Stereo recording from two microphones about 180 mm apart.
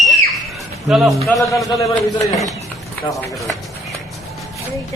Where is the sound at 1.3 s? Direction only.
15° left (ahead or behind).